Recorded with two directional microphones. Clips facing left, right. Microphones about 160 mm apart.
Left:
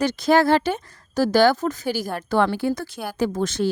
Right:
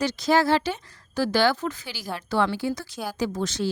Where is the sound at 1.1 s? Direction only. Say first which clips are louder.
Left 5 dB; 40° left (ahead or behind).